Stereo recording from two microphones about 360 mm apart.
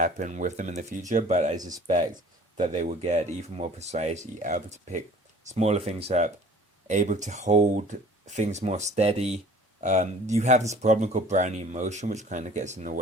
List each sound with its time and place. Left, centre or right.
0.0 s speech: centre